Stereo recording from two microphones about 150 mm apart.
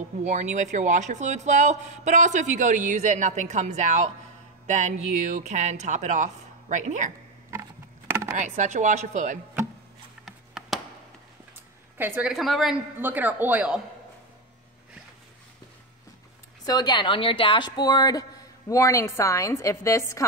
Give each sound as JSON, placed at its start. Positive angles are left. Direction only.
{"t": 0.2, "sound": "speech", "side_deg": -50}
{"t": 8.4, "sound": "speech", "side_deg": -55}
{"t": 10.2, "sound": "a sound", "side_deg": 0}
{"t": 12.0, "sound": "a woman's voice", "side_deg": -5}
{"t": 13.0, "sound": "speech", "side_deg": -10}
{"t": 16.6, "sound": "a woman's voice", "side_deg": 30}